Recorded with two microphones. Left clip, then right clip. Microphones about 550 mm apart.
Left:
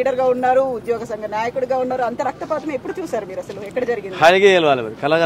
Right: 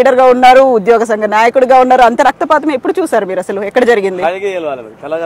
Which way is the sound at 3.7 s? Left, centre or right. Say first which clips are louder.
Right 13 dB; right.